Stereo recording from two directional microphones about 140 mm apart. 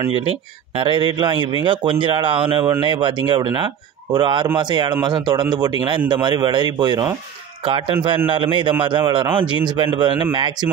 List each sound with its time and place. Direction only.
0.7 s speech: 40° right (ahead or behind)